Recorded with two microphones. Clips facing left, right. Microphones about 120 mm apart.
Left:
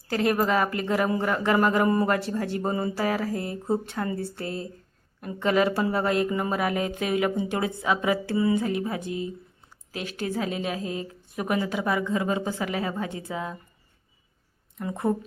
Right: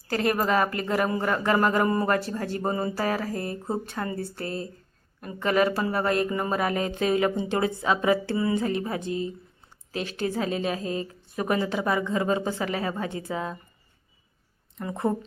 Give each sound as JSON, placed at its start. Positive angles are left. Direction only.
{"t": 0.1, "sound": "speech", "side_deg": 15}
{"t": 14.8, "sound": "speech", "side_deg": 10}